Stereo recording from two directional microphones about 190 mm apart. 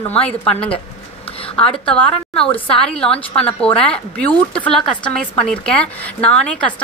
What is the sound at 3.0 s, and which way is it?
Speech, 30° left (ahead or behind).